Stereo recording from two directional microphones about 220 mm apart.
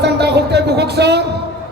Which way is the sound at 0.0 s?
50° right (ahead or behind).